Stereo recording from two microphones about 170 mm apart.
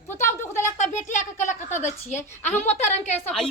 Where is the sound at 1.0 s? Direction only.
45° left (ahead or behind).